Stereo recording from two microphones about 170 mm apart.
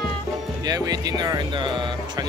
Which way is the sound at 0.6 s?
20° right (ahead or behind).